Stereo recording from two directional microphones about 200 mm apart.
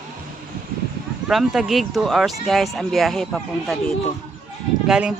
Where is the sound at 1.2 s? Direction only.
Centre (ahead or behind).